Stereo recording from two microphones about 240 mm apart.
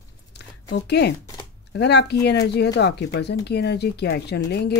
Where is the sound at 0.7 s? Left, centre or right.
Left.